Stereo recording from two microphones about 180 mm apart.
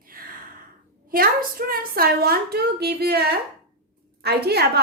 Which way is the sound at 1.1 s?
55° right (ahead or behind).